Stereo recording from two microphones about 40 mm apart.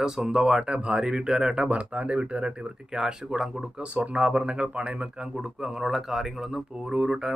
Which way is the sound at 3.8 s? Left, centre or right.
Right.